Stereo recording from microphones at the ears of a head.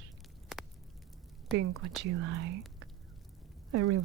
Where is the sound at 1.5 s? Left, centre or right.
Right.